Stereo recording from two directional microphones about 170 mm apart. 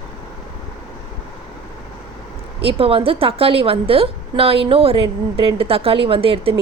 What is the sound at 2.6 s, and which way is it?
A woman's voice, 35° right (ahead or behind).